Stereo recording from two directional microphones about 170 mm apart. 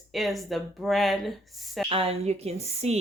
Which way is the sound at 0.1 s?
Centre (ahead or behind).